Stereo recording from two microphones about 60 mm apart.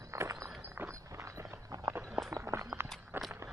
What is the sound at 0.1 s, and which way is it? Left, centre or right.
Walk, right.